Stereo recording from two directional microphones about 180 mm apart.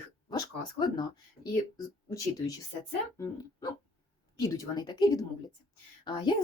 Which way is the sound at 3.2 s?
20° left (ahead or behind).